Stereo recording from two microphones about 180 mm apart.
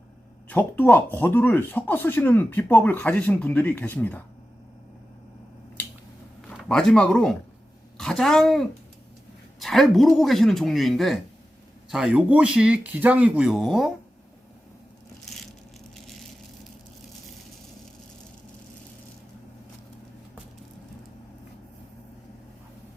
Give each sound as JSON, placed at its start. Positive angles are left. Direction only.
{"t": 0.4, "sound": "speech", "side_deg": 10}
{"t": 6.7, "sound": "speech", "side_deg": 5}